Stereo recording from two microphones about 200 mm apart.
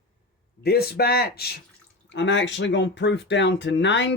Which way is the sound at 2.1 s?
65° left (ahead or behind).